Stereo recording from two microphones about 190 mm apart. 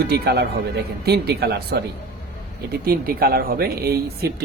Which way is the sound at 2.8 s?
55° right (ahead or behind).